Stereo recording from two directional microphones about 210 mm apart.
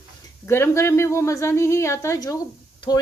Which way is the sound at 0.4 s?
10° left (ahead or behind).